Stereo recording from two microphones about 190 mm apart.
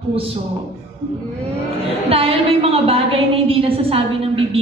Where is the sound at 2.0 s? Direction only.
30° right (ahead or behind).